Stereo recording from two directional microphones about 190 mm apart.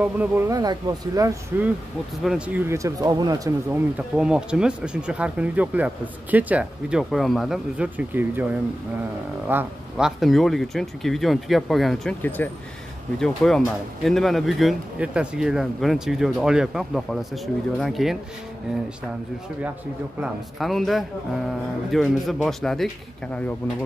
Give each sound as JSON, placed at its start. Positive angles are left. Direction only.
{"t": 0.0, "sound": "speech", "side_deg": -10}
{"t": 2.2, "sound": "speech", "side_deg": -5}
{"t": 4.2, "sound": "speech", "side_deg": -5}
{"t": 9.5, "sound": "speech", "side_deg": -5}
{"t": 20.2, "sound": "speech", "side_deg": 0}